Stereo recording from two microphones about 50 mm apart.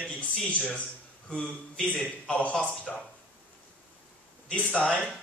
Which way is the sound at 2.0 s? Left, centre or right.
Left.